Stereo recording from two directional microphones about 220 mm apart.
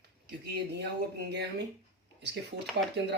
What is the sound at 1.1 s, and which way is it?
Speech, 50° right (ahead or behind).